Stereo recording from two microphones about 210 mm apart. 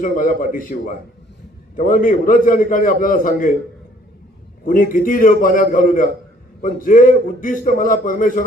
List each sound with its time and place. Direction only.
0.0 s a man's voice: 40° left (ahead or behind)
4.6 s a man's voice: 40° left (ahead or behind)